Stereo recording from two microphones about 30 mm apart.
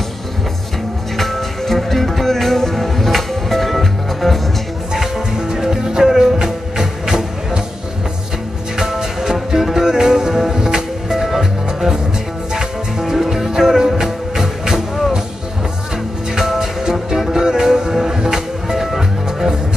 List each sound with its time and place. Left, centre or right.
1.1 s music: centre
4.9 s music: centre
8.7 s music: centre
13.0 s music: centre
16.3 s music: centre